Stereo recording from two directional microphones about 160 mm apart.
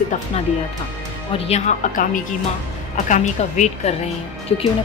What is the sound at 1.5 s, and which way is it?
Speech, 55° left (ahead or behind).